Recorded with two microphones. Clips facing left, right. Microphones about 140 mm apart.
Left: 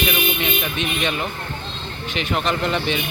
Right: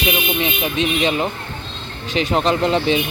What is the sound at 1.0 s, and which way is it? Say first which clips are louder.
Speech: right 5 dB; 30° right (ahead or behind).